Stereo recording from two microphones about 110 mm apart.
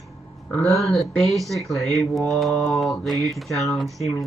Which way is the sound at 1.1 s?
5° left (ahead or behind).